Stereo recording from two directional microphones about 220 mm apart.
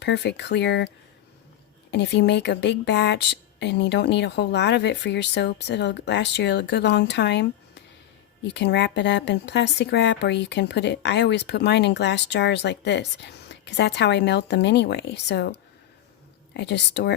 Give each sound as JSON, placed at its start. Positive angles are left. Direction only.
{"t": 0.0, "sound": "speech", "side_deg": 50}
{"t": 1.9, "sound": "speech", "side_deg": 50}
{"t": 8.4, "sound": "speech", "side_deg": 50}
{"t": 16.6, "sound": "speech", "side_deg": 50}